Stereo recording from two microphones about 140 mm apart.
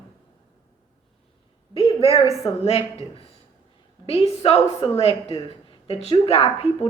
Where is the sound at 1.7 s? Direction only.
40° left (ahead or behind).